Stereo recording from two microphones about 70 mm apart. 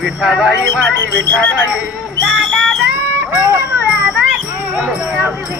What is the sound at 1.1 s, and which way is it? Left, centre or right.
Speech, left.